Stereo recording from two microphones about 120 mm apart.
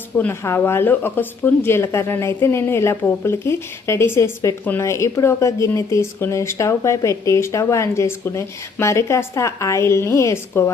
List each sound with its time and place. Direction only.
0.2 s speech: 20° left (ahead or behind)